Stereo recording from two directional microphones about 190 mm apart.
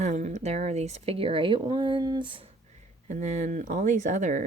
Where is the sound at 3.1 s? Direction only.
40° right (ahead or behind).